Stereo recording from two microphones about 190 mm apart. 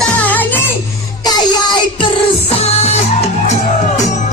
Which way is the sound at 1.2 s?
20° left (ahead or behind).